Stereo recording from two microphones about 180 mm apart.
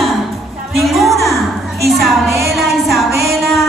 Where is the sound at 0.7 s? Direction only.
Centre (ahead or behind).